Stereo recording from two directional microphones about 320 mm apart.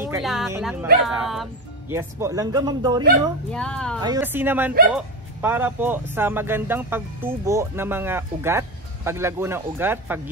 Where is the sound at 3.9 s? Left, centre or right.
Centre.